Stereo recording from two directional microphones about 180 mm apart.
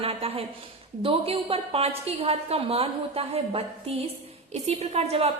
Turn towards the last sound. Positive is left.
turn(degrees=-35)  # may be behind; listen again after turning